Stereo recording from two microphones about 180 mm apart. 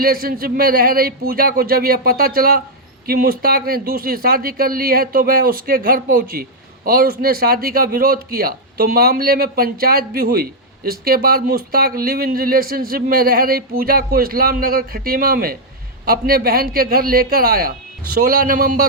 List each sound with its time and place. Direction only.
0.0 s speech: 55° right (ahead or behind)